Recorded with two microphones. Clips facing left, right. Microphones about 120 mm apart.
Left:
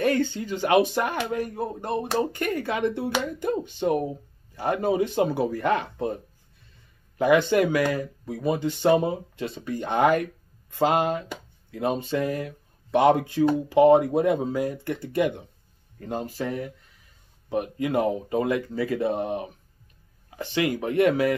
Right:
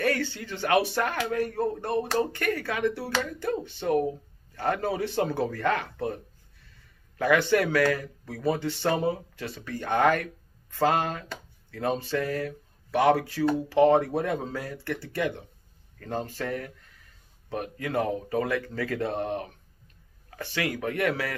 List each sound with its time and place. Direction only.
0.0 s speech: 20° left (ahead or behind)
7.2 s speech: 20° left (ahead or behind)